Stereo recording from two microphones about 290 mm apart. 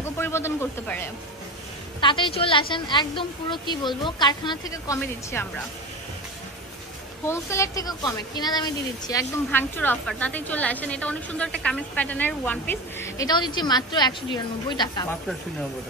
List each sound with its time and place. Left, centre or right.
0.2 s speech: centre
7.2 s a woman's voice: centre